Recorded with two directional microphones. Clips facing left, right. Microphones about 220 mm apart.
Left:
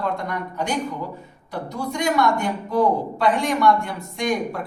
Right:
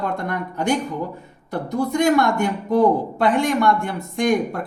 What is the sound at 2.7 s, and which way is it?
Speech, 50° right (ahead or behind).